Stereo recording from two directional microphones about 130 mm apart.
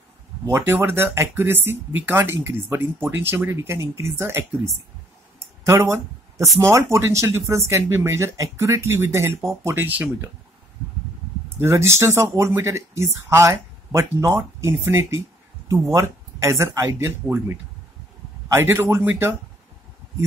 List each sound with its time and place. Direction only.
0.5 s speech: 20° right (ahead or behind)
5.4 s a sound: 20° right (ahead or behind)
6.6 s speech: 20° right (ahead or behind)
11.5 s speech: 20° right (ahead or behind)